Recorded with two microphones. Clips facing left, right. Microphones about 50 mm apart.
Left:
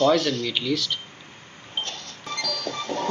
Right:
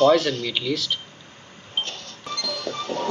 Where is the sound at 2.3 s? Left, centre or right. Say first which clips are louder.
Even; left.